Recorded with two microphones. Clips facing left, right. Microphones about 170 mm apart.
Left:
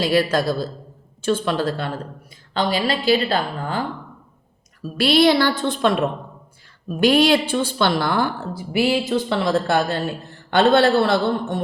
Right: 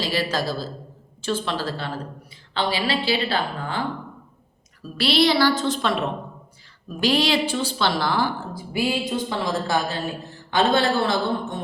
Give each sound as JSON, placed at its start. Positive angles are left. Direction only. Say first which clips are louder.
{"t": 0.0, "sound": "a woman's voice", "louder": "left 6 dB", "side_deg": 55}
{"t": 4.9, "sound": "a woman's voice", "louder": "left 4 dB", "side_deg": 50}
{"t": 7.0, "sound": "a woman's voice", "louder": "left 5 dB", "side_deg": 55}